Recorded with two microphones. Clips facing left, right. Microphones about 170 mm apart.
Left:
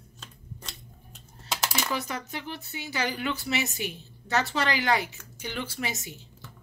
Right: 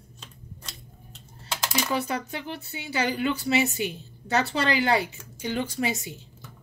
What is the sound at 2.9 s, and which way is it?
A woman's voice, 30° right (ahead or behind).